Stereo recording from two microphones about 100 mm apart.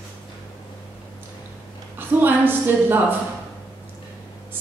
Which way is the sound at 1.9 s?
20° right (ahead or behind).